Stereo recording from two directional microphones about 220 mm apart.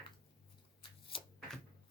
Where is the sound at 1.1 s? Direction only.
25° left (ahead or behind).